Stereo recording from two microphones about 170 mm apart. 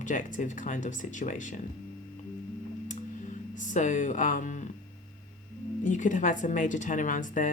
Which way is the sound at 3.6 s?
45° left (ahead or behind).